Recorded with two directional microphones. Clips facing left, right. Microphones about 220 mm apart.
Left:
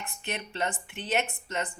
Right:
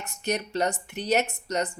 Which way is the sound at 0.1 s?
40° right (ahead or behind).